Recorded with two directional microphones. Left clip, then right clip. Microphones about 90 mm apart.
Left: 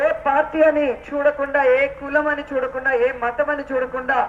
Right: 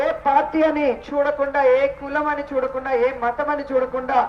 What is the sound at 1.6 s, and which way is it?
A woman's voice, 10° left (ahead or behind).